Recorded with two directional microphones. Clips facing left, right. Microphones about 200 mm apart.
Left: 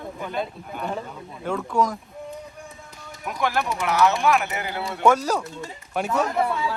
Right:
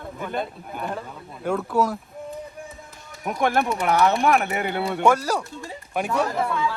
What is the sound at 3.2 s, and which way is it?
Speech, 55° right (ahead or behind).